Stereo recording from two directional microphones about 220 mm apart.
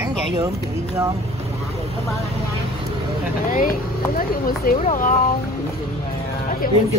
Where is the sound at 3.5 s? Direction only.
40° left (ahead or behind).